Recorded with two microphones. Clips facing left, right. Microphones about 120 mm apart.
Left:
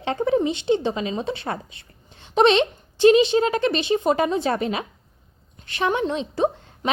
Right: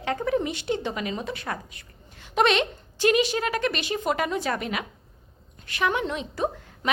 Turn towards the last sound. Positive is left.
turn(degrees=25)  # may be behind; listen again after turning